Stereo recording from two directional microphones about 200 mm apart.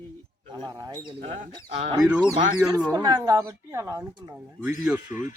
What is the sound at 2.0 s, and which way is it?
Speech, 5° right (ahead or behind).